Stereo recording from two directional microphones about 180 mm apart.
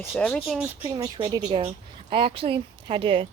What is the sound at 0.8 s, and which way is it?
Speech, 20° right (ahead or behind).